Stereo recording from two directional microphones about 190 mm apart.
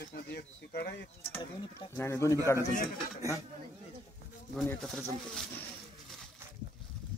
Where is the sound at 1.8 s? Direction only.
15° left (ahead or behind).